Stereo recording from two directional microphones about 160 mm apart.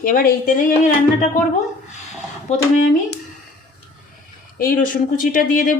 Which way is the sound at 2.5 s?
50° left (ahead or behind).